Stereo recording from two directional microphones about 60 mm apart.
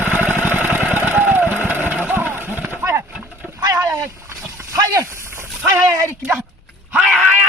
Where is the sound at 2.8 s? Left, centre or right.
Right.